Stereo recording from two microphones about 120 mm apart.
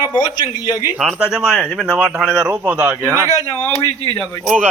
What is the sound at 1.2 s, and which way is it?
Speech, 5° right (ahead or behind).